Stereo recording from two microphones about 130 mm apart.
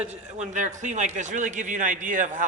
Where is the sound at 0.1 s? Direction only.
65° right (ahead or behind).